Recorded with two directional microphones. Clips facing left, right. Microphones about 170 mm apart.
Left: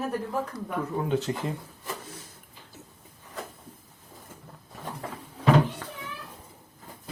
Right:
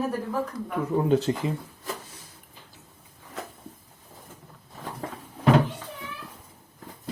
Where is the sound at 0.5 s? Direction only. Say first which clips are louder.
Right 2 dB; 30° left (ahead or behind).